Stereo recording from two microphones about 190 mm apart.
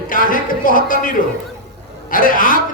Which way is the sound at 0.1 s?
45° left (ahead or behind).